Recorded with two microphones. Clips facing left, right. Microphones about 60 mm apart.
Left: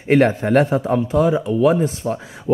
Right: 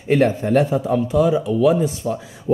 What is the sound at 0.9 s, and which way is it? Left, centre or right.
A man's voice, left.